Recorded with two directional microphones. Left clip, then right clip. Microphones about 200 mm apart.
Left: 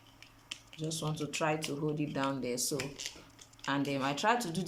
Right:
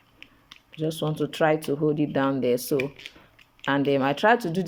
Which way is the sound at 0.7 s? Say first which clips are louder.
Right 11 dB; 40° right (ahead or behind).